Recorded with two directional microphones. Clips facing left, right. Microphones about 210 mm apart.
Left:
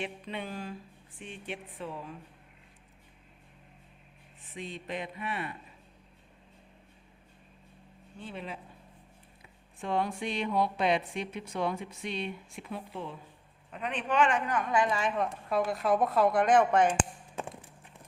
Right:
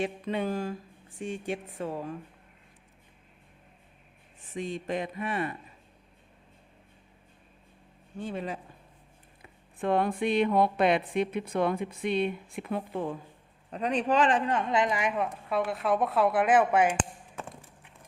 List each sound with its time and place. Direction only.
0.0 s speech: 45° right (ahead or behind)
4.4 s speech: 45° right (ahead or behind)
8.2 s speech: 45° right (ahead or behind)
9.7 s a woman's voice: 55° right (ahead or behind)
13.7 s speech: 40° right (ahead or behind); by 15.1 s 15° right (ahead or behind)
15.4 s speech: centre (ahead or behind)
17.0 s a sound: 15° left (ahead or behind)